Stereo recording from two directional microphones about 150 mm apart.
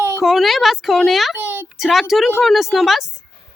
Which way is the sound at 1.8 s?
Centre (ahead or behind).